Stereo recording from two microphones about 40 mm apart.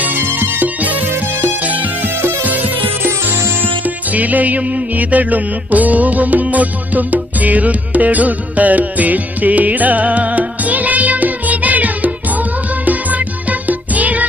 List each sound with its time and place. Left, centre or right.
0.2 s music: right
0.6 s music: right